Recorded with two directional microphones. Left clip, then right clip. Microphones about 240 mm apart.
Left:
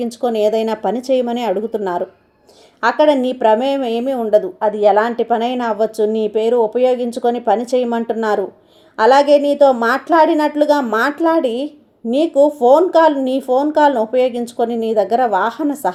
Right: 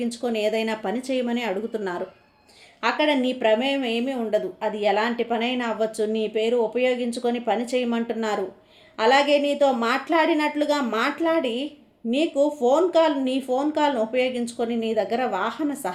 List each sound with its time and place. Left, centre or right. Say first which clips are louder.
0.0 s speech: left 9 dB; left